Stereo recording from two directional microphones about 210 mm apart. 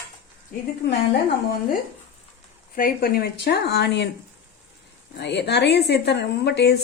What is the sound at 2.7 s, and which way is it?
A woman's voice, 45° left (ahead or behind).